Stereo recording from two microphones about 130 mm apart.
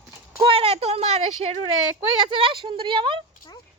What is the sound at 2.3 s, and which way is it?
Speech, 40° right (ahead or behind).